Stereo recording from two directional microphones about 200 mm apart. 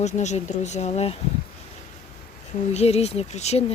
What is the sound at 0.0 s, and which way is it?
Speech, 35° left (ahead or behind).